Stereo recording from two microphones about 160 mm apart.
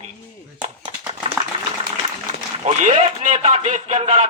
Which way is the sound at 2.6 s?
45° right (ahead or behind).